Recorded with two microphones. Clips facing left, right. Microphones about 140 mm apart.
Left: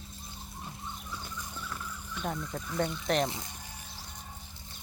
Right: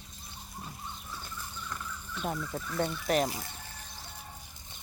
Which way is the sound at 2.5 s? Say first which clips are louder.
Even; 5° right (ahead or behind).